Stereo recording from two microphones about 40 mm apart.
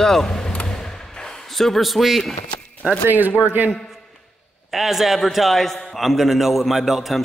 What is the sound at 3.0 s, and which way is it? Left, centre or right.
Speech, right.